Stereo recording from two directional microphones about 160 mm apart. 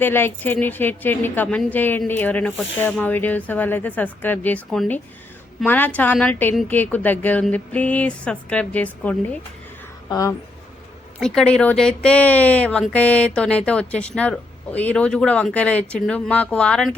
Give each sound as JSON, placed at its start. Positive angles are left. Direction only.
{"t": 0.0, "sound": "a woman's voice", "side_deg": 15}
{"t": 10.1, "sound": "speech", "side_deg": 20}
{"t": 11.2, "sound": "a woman's voice", "side_deg": 5}